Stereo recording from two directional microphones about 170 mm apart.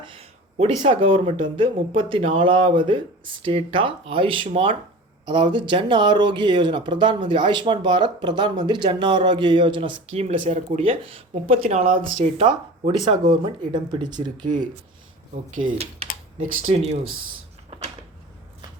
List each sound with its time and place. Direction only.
0.0 s a sound: 30° right (ahead or behind)
0.5 s speech: 45° right (ahead or behind)
0.9 s speech: 30° right (ahead or behind); by 10.8 s 45° right (ahead or behind)
10.8 s speech: 35° right (ahead or behind)
15.4 s speech: 35° right (ahead or behind)